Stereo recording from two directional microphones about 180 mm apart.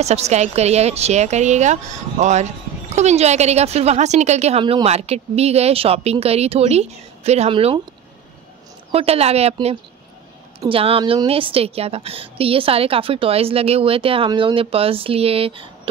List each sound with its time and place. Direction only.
0.0 s a woman's voice: 35° right (ahead or behind)
8.9 s a woman's voice: 35° right (ahead or behind)